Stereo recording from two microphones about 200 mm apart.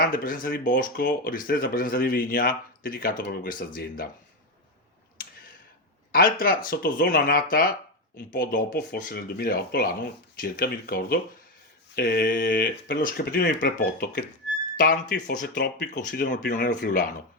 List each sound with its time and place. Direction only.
0.0 s speech: 45° left (ahead or behind)
6.1 s speech: 45° left (ahead or behind)